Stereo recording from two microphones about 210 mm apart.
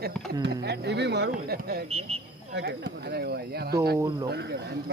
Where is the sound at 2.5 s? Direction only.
50° right (ahead or behind).